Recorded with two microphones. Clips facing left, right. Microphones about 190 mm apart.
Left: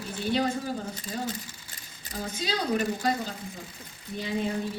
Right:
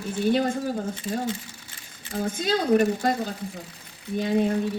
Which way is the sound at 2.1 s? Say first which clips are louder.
Right 7 dB; 50° right (ahead or behind).